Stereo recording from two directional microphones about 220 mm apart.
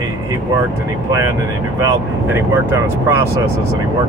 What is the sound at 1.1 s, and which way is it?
Speech, 15° right (ahead or behind).